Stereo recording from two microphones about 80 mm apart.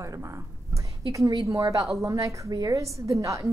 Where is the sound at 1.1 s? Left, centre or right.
Right.